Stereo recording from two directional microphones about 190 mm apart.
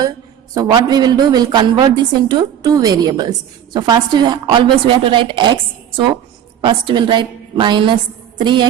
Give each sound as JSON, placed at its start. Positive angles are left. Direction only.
{"t": 0.5, "sound": "a woman's voice", "side_deg": -20}
{"t": 6.6, "sound": "a woman's voice", "side_deg": -25}